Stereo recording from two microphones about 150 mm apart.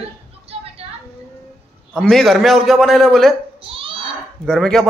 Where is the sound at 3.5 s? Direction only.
35° right (ahead or behind).